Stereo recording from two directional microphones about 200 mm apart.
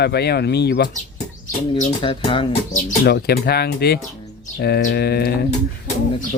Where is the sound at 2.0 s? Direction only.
25° left (ahead or behind).